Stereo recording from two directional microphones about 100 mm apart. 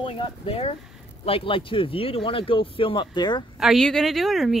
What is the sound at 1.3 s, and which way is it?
Speech, 65° left (ahead or behind).